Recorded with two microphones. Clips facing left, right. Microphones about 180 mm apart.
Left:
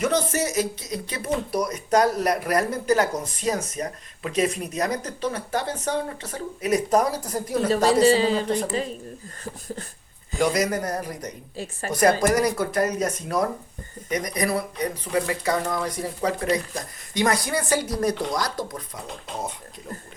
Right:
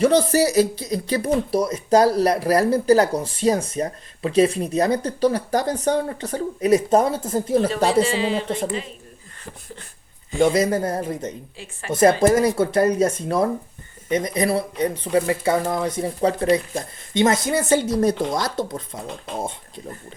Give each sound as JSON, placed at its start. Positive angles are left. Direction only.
{"t": 0.0, "sound": "speech", "side_deg": -35}
{"t": 8.0, "sound": "speech", "side_deg": 40}
{"t": 10.3, "sound": "speech", "side_deg": -25}
{"t": 11.5, "sound": "speech", "side_deg": 40}
{"t": 11.9, "sound": "speech", "side_deg": -25}